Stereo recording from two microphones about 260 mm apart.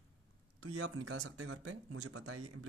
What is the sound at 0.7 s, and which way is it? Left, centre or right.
Speech, right.